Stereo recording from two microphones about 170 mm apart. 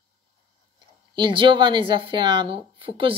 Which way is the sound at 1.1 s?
30° right (ahead or behind).